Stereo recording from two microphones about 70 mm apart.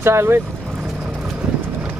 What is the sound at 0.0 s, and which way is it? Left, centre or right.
Speech, right.